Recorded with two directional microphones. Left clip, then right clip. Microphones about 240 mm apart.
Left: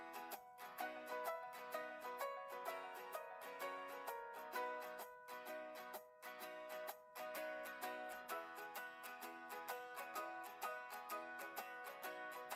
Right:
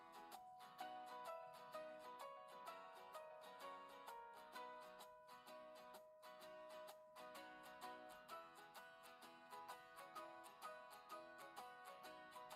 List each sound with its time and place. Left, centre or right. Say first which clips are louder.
0.8 s music: left 7 dB; left
6.7 s music: left 8 dB; left
9.6 s music: left 8 dB; left